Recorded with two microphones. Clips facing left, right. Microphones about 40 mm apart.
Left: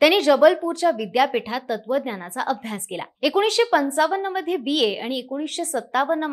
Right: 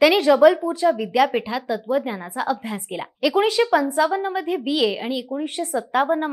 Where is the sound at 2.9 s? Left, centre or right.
Centre.